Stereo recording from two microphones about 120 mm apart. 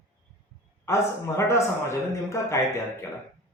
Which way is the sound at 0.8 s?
25° left (ahead or behind).